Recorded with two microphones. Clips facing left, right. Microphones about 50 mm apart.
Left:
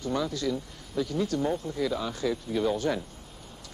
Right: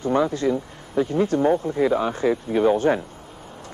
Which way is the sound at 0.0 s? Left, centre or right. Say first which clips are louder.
Right 9 dB; right.